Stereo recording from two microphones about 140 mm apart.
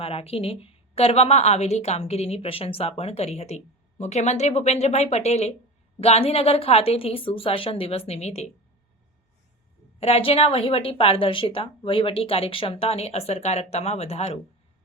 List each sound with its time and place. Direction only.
0.0 s a woman's voice: 45° left (ahead or behind)
10.0 s a woman's voice: 45° left (ahead or behind)